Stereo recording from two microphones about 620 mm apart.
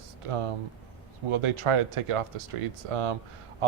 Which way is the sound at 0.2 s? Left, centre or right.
Right.